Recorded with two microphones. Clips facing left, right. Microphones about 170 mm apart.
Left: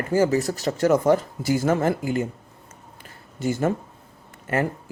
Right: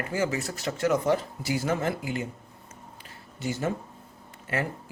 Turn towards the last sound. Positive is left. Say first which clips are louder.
# left 6 dB
turn(degrees=50)  # may be behind; listen again after turning